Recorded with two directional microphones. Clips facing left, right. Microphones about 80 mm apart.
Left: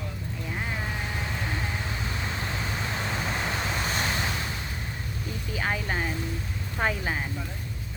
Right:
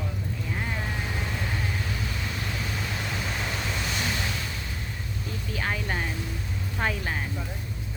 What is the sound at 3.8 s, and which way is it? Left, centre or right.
Waves, left.